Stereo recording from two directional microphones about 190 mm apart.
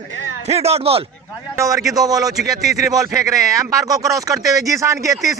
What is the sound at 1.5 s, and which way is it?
Speech, 15° right (ahead or behind).